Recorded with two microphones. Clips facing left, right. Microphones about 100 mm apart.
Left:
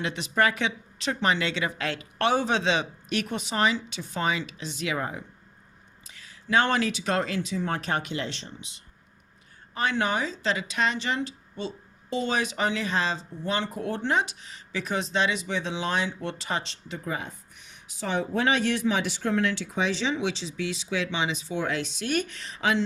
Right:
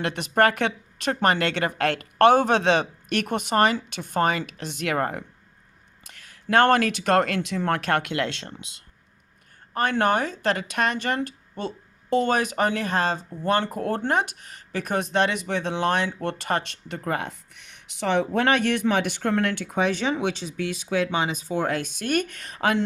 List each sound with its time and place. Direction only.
0.0 s speech: 55° right (ahead or behind)
9.7 s speech: 55° right (ahead or behind)